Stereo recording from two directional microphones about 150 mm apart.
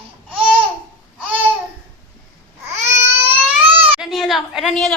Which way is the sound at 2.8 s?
15° right (ahead or behind).